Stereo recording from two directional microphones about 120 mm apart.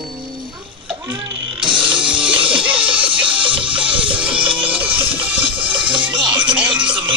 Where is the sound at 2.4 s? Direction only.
45° right (ahead or behind).